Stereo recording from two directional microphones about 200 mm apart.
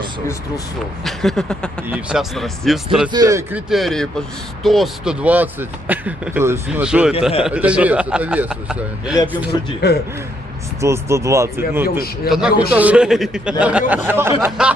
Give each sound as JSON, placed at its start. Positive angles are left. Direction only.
{"t": 1.0, "sound": "a man's voice", "side_deg": 0}
{"t": 3.1, "sound": "speech", "side_deg": -15}
{"t": 3.7, "sound": "a man's voice", "side_deg": 0}
{"t": 9.5, "sound": "a man's voice", "side_deg": 20}
{"t": 10.8, "sound": "a man's voice", "side_deg": -15}